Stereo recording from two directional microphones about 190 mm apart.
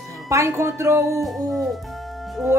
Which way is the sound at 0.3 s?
15° right (ahead or behind).